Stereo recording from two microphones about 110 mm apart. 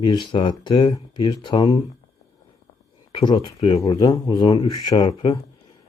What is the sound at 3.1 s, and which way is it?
Speech, 40° left (ahead or behind).